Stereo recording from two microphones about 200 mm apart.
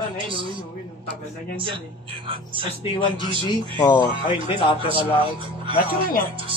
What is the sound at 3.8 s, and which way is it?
Speech, 20° left (ahead or behind).